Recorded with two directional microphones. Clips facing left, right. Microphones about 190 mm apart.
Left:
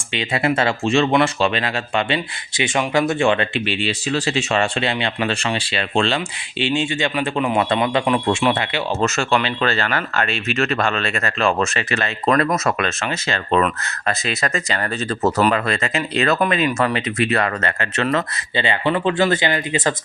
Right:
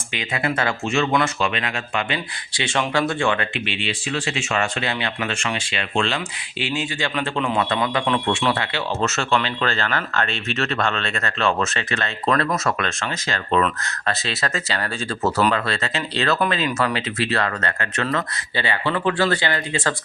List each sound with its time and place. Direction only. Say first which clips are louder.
0.1 s speech: left 5 dB; 25° left (ahead or behind)
2.6 s speech: left 3 dB; 20° left (ahead or behind)
3.7 s speech: left 5 dB; 40° left (ahead or behind)
7.2 s speech: left 2 dB; 15° left (ahead or behind)
15.2 s speech: left 2 dB; 10° left (ahead or behind)